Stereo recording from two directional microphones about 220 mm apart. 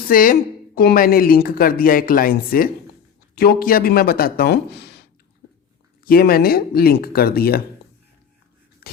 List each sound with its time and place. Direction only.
0.1 s speech: 40° left (ahead or behind)
6.1 s speech: 40° left (ahead or behind)